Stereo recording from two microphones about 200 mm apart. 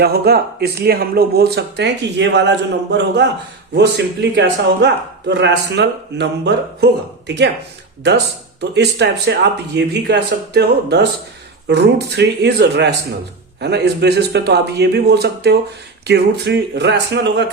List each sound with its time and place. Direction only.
0.0 s speech: 50° right (ahead or behind)
8.7 s speech: 60° right (ahead or behind)